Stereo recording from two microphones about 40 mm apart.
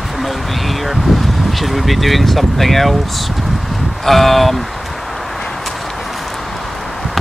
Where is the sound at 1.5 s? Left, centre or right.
Centre.